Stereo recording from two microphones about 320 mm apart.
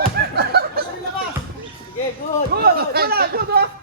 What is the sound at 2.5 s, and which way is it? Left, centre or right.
Speech, right.